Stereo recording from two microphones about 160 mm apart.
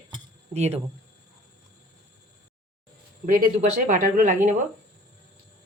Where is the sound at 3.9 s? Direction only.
60° right (ahead or behind).